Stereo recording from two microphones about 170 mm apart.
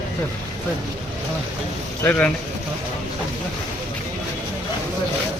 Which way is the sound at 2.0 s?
10° left (ahead or behind).